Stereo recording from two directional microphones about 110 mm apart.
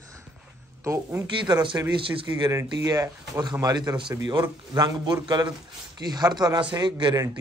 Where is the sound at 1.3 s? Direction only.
45° right (ahead or behind).